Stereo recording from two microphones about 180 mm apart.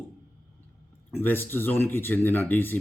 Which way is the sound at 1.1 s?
10° left (ahead or behind).